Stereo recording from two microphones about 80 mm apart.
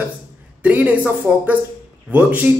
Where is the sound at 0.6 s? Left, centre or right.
Right.